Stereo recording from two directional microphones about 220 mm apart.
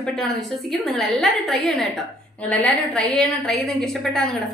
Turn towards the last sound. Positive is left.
turn(degrees=0)  # may be behind; listen again after turning